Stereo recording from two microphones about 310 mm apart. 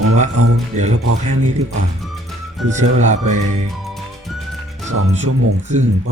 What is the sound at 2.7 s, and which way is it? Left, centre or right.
Speech, right.